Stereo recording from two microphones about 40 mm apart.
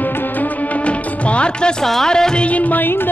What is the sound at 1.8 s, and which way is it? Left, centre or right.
Music, centre.